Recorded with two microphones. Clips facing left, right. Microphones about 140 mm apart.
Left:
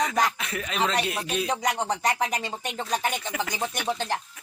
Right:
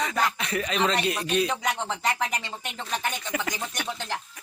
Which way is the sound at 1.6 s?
45° left (ahead or behind).